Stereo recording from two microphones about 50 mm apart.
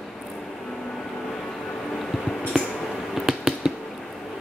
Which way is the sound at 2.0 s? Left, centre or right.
Centre.